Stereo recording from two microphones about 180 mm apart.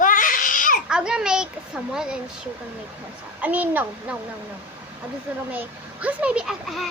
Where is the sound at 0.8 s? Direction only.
5° right (ahead or behind).